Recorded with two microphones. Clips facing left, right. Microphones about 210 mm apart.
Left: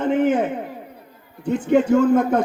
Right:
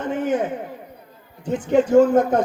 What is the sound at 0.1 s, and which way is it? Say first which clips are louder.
Speech: left 3 dB; 75° left (ahead or behind).